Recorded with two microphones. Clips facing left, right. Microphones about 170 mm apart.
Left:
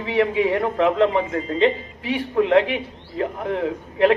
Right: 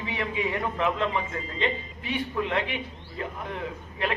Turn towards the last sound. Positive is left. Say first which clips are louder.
# left 13 dB
turn(degrees=70)  # may be behind; listen again after turning